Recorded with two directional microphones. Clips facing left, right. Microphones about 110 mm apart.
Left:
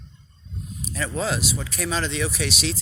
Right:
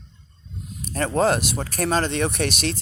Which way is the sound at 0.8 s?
50° right (ahead or behind).